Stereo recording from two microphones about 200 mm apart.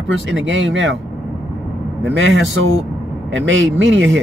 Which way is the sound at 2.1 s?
70° right (ahead or behind).